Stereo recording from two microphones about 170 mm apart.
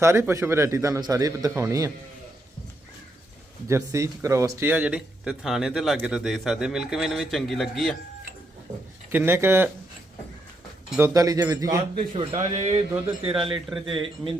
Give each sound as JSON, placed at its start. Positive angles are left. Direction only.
{"t": 0.0, "sound": "a man's voice", "side_deg": -15}
{"t": 3.7, "sound": "speech", "side_deg": -15}
{"t": 9.1, "sound": "a man's voice", "side_deg": -15}
{"t": 10.9, "sound": "speech", "side_deg": -15}
{"t": 11.9, "sound": "a man's voice", "side_deg": -35}
{"t": 13.7, "sound": "speech", "side_deg": 0}